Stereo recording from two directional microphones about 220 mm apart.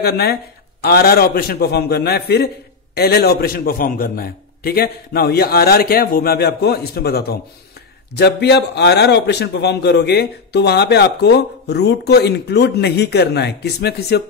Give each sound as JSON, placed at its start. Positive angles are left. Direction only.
{"t": 0.0, "sound": "a man's voice", "side_deg": 45}